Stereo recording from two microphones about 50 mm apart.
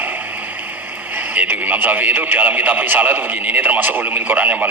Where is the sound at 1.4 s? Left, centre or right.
Right.